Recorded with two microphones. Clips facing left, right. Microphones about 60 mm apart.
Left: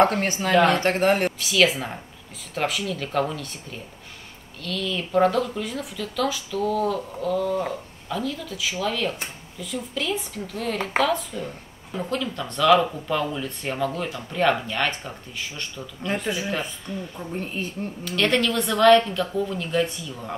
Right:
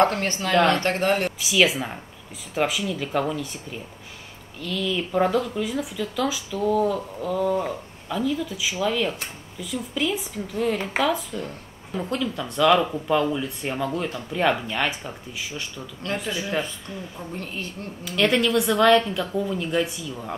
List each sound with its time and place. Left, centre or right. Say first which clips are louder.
0.0 s speech: left 1 dB; centre
1.4 s speech: even; centre
4.6 s speech: right 2 dB; centre
16.3 s speech: left 2 dB; centre
16.9 s speech: left 3 dB; centre
17.3 s speech: left 4 dB; centre
18.0 s speech: right 1 dB; centre